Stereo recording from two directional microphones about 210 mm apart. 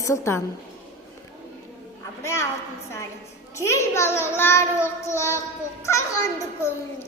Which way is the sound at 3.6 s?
15° left (ahead or behind).